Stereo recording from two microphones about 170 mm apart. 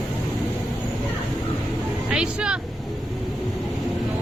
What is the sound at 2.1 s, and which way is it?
Vehicle, 5° right (ahead or behind).